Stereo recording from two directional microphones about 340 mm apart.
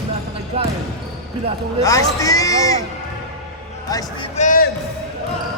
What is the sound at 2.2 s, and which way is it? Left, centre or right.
Speech, centre.